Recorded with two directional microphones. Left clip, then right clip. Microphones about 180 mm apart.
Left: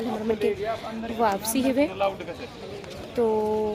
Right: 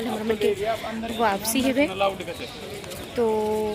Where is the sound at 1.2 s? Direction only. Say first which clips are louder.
Right 1 dB; 5° left (ahead or behind).